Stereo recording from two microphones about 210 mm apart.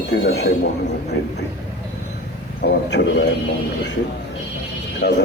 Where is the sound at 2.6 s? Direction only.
55° left (ahead or behind).